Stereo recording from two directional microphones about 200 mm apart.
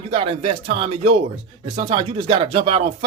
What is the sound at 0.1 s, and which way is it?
Speech, 30° right (ahead or behind).